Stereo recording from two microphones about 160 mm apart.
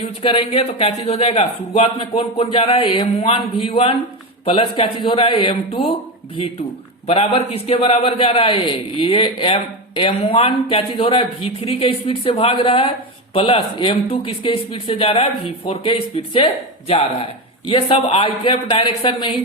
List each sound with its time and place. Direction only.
0.2 s a man's voice: 35° left (ahead or behind)
7.1 s a man's voice: 40° left (ahead or behind)